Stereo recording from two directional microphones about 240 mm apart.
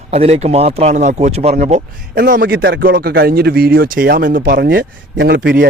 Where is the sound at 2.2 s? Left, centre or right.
Right.